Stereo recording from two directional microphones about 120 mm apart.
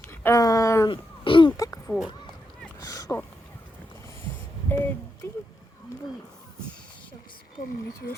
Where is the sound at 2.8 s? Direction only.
30° left (ahead or behind).